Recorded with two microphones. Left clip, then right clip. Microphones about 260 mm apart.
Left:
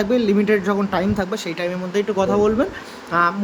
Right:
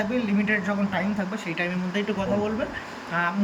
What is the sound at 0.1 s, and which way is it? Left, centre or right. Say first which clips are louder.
A woman's voice: left 8 dB; centre.